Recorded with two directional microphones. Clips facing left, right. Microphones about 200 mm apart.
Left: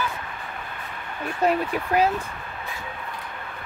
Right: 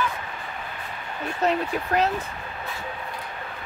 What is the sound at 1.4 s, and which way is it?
Speech, 10° left (ahead or behind).